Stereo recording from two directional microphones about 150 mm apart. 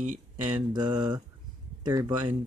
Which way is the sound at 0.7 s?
30° right (ahead or behind).